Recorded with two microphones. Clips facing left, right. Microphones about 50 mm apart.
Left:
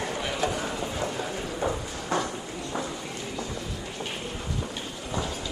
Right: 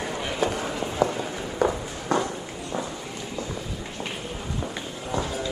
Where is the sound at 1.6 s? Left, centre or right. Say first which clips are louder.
Right 6 dB; right.